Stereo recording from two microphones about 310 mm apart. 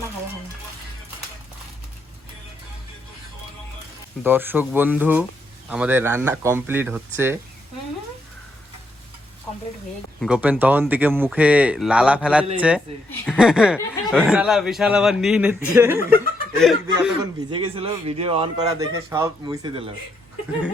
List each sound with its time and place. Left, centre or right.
4.2 s a man's voice: centre
10.2 s a man's voice: centre
17.5 s a man's voice: centre